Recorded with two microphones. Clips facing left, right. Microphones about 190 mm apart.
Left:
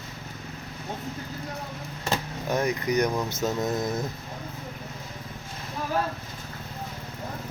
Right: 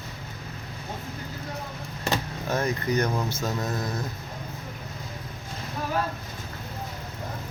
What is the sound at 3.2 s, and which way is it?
Mantra, 20° left (ahead or behind).